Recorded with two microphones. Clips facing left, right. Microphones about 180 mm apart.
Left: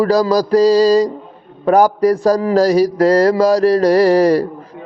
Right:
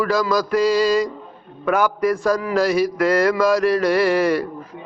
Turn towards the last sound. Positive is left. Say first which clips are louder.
# left 6 dB
turn(degrees=35)  # may be behind; listen again after turning